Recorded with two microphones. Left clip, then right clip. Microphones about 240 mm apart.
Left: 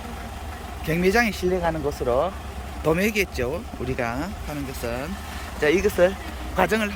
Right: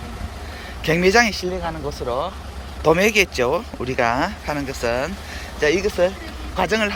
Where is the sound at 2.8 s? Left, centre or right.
Centre.